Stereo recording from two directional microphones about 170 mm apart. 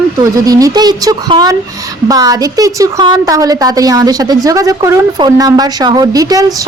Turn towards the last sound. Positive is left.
turn(degrees=-20)  # may be behind; listen again after turning